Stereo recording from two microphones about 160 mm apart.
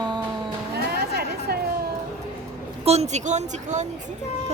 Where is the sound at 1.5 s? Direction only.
80° right.